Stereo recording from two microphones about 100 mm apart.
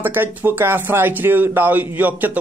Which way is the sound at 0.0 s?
20° right (ahead or behind).